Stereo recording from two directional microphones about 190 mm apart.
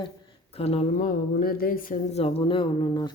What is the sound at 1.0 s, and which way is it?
Music, 50° left (ahead or behind).